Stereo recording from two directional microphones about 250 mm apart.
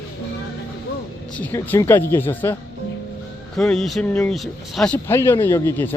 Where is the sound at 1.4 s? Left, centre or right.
Centre.